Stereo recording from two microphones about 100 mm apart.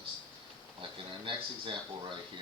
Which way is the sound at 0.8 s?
55° right (ahead or behind).